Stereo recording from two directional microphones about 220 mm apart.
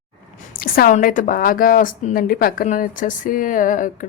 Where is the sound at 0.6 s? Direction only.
40° left (ahead or behind).